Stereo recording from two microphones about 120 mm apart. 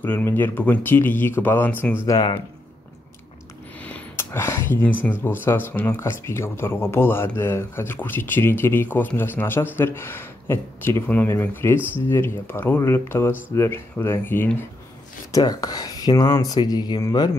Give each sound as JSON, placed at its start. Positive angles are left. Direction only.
{"t": 0.0, "sound": "speech", "side_deg": 15}
{"t": 2.0, "sound": "speech", "side_deg": 35}
{"t": 3.8, "sound": "a sound", "side_deg": 15}
{"t": 5.0, "sound": "speech", "side_deg": 15}
{"t": 15.3, "sound": "speech", "side_deg": 30}